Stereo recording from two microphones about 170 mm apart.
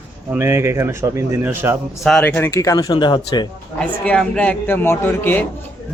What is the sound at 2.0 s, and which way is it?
Speech, 5° left (ahead or behind).